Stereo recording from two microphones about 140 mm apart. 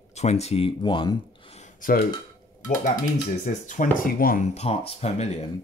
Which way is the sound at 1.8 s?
90° left.